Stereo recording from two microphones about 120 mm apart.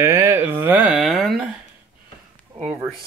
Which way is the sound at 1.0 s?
Centre (ahead or behind).